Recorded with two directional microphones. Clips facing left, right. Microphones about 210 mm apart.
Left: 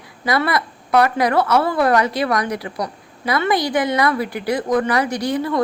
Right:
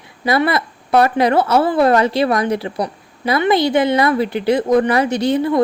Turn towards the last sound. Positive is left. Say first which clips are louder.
# right 5 dB
turn(degrees=-25)  # may be behind; listen again after turning